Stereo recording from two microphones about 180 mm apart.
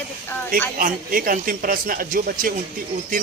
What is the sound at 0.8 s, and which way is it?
Speech, 50° right (ahead or behind).